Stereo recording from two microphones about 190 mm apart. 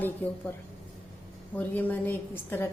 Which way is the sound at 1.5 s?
10° left (ahead or behind).